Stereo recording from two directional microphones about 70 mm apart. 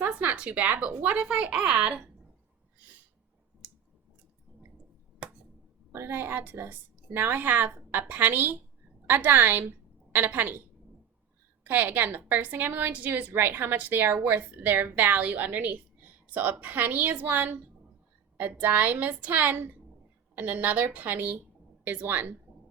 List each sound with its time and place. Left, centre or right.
0.0 s speech: right
5.9 s a woman's voice: right
11.6 s a woman's voice: right